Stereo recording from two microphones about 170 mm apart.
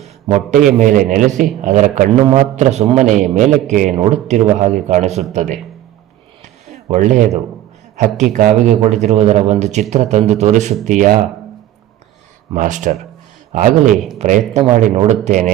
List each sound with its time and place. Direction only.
0.0 s a man's voice: 40° right (ahead or behind)
6.9 s speech: 50° right (ahead or behind)
12.5 s speech: 50° right (ahead or behind)